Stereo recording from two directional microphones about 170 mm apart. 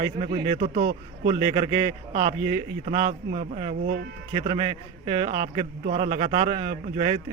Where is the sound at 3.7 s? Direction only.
65° right (ahead or behind).